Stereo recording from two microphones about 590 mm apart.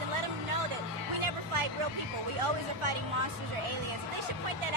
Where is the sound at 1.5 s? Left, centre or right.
Right.